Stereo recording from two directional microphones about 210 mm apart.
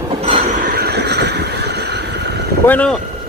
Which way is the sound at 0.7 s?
50° right (ahead or behind).